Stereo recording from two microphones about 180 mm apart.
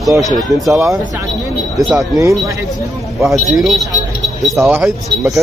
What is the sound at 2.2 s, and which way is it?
Speech, 20° right (ahead or behind).